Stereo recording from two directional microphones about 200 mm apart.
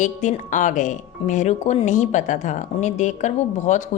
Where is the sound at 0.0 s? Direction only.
40° left (ahead or behind).